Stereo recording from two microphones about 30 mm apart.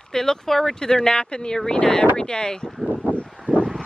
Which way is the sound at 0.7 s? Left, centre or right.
Left.